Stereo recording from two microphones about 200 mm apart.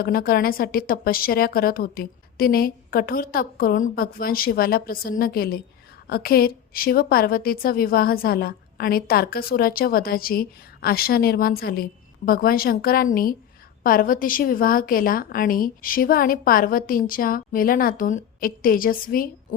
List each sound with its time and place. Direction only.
0.0 s a woman's voice: 50° left (ahead or behind)